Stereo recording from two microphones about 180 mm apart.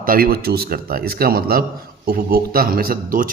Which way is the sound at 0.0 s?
55° right (ahead or behind).